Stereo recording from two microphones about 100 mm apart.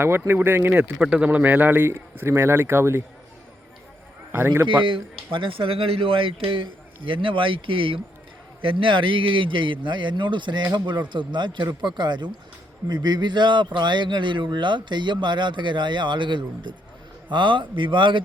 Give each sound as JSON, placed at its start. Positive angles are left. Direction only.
{"t": 0.0, "sound": "a man's voice", "side_deg": -20}
{"t": 0.9, "sound": "a man's voice", "side_deg": -10}
{"t": 4.3, "sound": "a man's voice", "side_deg": -20}
{"t": 4.9, "sound": "speech", "side_deg": -60}